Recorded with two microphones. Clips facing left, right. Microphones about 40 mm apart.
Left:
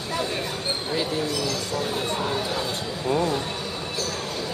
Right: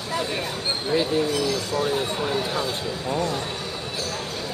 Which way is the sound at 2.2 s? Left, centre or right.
Centre.